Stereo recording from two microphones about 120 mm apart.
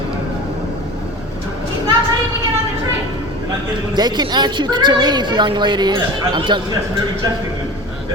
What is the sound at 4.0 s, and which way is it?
A woman's voice, 35° right (ahead or behind).